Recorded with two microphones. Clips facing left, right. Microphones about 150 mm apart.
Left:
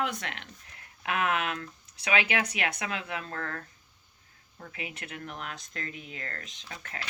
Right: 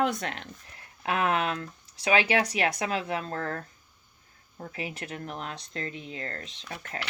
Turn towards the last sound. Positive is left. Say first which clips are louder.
# right 5 dB
turn(degrees=-35)  # may be behind; listen again after turning